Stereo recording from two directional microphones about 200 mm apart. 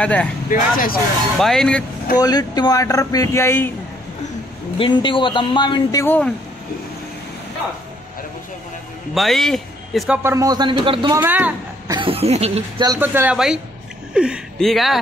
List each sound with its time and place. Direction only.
0.0 s speech: 5° left (ahead or behind)
0.5 s speech: 45° left (ahead or behind)
1.4 s speech: 5° left (ahead or behind)
2.1 s speech: 20° left (ahead or behind)
4.7 s speech: 25° left (ahead or behind); by 6.3 s 10° left (ahead or behind)
9.1 s a man's voice: centre (ahead or behind); by 11.1 s 25° right (ahead or behind)
11.1 s a man's voice: 10° right (ahead or behind)
11.9 s speech: 25° right (ahead or behind)
12.8 s a man's voice: 15° right (ahead or behind)